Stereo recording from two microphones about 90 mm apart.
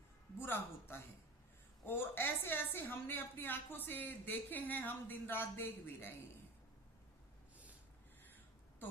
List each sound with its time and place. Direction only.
0.3 s a woman's voice: 25° left (ahead or behind)